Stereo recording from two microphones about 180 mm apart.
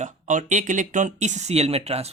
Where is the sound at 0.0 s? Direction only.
45° right (ahead or behind).